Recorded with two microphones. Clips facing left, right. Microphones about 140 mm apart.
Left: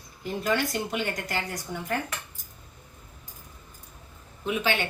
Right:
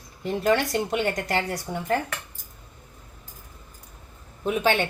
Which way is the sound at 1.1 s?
70° right (ahead or behind).